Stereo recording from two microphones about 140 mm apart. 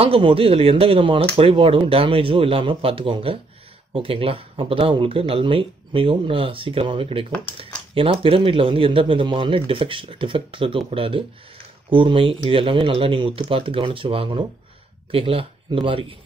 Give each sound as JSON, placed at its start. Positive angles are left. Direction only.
{"t": 0.0, "sound": "speech", "side_deg": -40}